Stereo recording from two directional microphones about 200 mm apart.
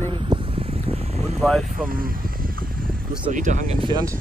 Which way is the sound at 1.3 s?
Centre (ahead or behind).